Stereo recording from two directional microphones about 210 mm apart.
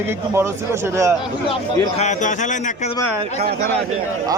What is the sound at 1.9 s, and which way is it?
Speech, 35° left (ahead or behind).